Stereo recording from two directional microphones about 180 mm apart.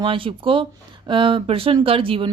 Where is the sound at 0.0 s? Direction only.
30° right (ahead or behind).